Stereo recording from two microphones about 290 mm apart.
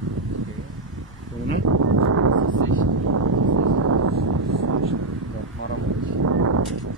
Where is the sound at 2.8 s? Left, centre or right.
Right.